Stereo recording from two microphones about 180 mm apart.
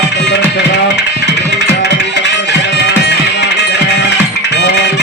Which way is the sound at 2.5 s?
70° left (ahead or behind).